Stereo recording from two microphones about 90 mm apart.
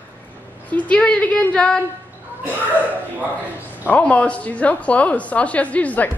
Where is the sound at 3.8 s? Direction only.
15° left (ahead or behind).